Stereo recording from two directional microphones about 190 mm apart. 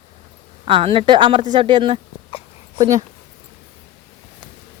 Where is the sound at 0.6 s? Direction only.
30° right (ahead or behind).